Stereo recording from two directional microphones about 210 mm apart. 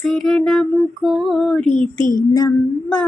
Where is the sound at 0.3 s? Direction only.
Centre (ahead or behind).